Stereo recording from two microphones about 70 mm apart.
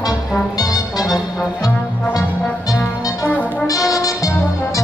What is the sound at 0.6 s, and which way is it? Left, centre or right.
Music, left.